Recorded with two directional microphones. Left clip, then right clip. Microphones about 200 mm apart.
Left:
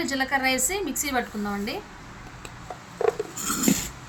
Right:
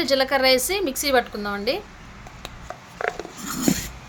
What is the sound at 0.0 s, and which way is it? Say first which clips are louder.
A woman's voice: right 5 dB; 50° right (ahead or behind).